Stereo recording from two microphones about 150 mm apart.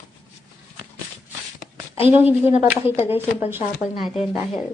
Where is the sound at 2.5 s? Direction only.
50° left (ahead or behind).